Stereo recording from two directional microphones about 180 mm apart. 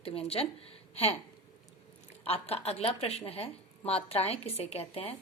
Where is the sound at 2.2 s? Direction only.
35° left (ahead or behind).